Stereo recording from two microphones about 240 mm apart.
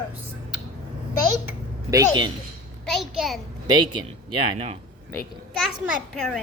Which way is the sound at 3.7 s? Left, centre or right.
Centre.